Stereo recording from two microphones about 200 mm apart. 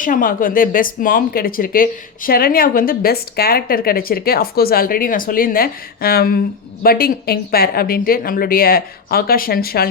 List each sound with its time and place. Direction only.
0.0 s speech: 45° left (ahead or behind)